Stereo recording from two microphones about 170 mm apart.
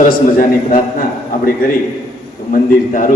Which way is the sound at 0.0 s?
55° left (ahead or behind).